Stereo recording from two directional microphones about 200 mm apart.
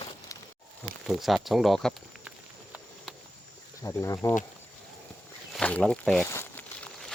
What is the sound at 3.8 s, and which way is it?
Speech, 15° left (ahead or behind).